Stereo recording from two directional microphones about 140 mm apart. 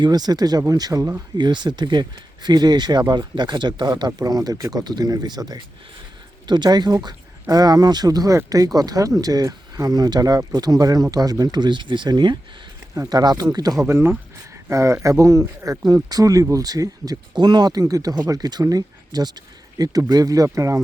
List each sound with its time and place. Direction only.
0.0 s speech: 30° right (ahead or behind)
1.4 s speech: 30° right (ahead or behind)